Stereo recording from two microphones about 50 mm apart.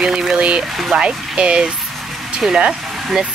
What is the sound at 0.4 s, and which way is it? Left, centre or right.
Speech, right.